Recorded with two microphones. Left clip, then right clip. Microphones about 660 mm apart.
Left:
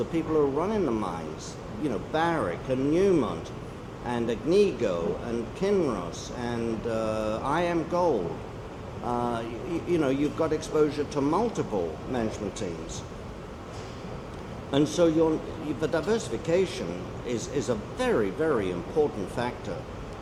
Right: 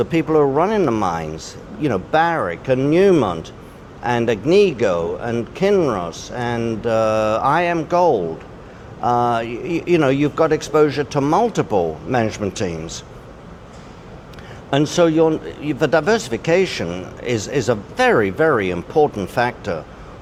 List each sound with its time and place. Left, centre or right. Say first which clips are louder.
0.1 s speech: right 8 dB; right
9.0 s speech: right 12 dB; right
14.7 s speech: right 8 dB; right